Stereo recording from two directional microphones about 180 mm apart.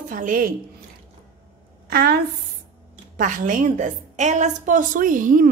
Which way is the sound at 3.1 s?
45° right (ahead or behind).